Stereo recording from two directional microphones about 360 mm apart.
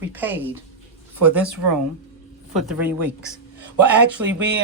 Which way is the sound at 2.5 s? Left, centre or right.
Centre.